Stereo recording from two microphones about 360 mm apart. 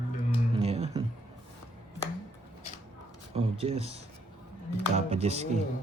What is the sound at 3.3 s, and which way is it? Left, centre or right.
Speech, centre.